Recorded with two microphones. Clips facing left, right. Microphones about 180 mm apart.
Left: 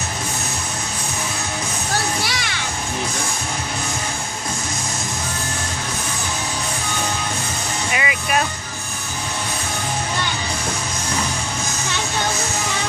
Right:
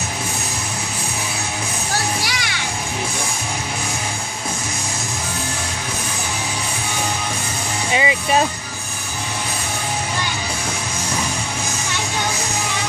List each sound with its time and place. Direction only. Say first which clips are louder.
7.9 s music: right 5 dB; 25° right (ahead or behind)